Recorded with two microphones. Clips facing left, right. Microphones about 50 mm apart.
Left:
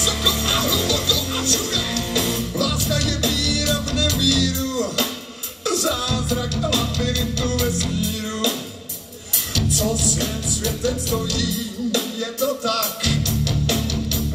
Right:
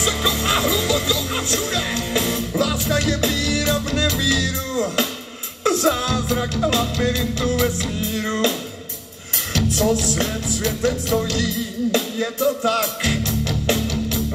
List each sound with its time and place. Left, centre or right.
0.0 s music: right
9.7 s music: right